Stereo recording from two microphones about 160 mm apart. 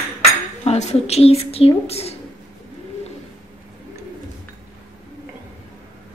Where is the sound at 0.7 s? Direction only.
40° left (ahead or behind).